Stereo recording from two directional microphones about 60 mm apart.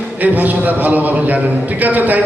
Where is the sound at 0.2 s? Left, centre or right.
Right.